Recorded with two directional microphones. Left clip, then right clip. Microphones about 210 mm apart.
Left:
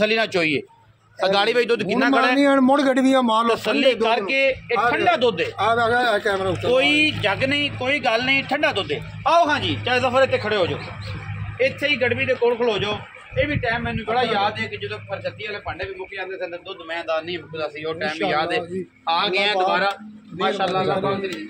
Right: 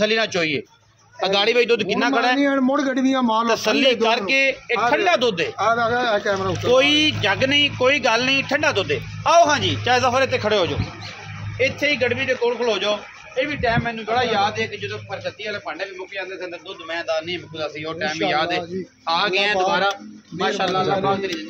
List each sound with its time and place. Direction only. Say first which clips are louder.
0.0 s a man's voice: even; 15° left (ahead or behind)
2.4 s a man's voice: left 3 dB; 55° left (ahead or behind)
3.4 s a man's voice: right 1 dB; 35° right (ahead or behind)
5.6 s speech: left 1 dB; 15° left (ahead or behind)
6.7 s speech: right 2 dB; 25° right (ahead or behind)
11.5 s a man's voice: right 1 dB; 20° right (ahead or behind)
16.9 s a man's voice: right 1 dB; 10° right (ahead or behind)
19.2 s a man's voice: right 1 dB; centre (ahead or behind)
20.4 s speech: even; 25° right (ahead or behind)